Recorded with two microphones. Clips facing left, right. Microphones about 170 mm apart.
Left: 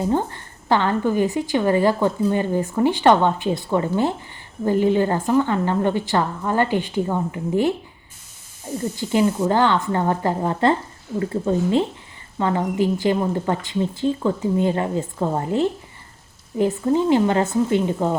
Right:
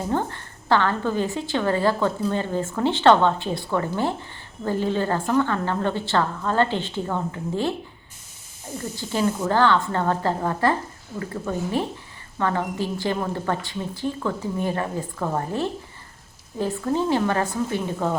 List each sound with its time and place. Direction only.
0.0 s a woman's voice: 15° left (ahead or behind)
9.0 s a woman's voice: 15° left (ahead or behind)